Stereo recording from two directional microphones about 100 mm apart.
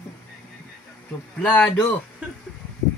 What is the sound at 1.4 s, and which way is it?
Speech, 15° left (ahead or behind).